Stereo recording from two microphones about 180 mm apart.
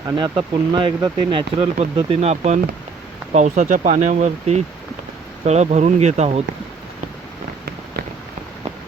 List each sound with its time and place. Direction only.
0.2 s speech: 25° right (ahead or behind)